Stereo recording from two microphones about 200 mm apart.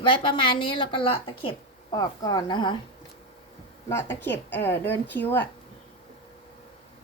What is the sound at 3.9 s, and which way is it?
A woman's voice, 15° left (ahead or behind).